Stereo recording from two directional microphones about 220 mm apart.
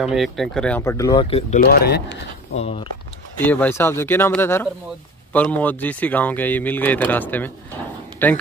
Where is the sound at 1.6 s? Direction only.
45° left (ahead or behind).